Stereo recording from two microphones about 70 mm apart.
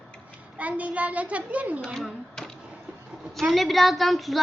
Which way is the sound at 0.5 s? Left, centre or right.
Centre.